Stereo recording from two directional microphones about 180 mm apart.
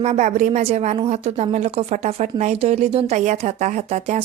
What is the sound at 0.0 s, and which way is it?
A woman's voice, 40° right (ahead or behind).